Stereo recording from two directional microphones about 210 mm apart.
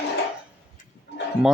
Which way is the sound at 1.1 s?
55° left (ahead or behind).